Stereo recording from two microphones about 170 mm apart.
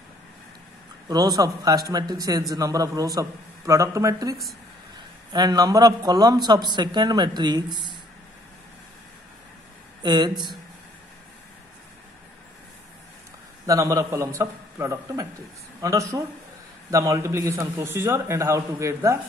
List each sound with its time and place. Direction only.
1.0 s a man's voice: 20° right (ahead or behind)
10.0 s a man's voice: 25° right (ahead or behind)
13.7 s a man's voice: 20° right (ahead or behind)